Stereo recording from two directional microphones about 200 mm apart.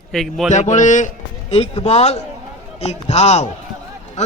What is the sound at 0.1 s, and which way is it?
Speech, centre (ahead or behind).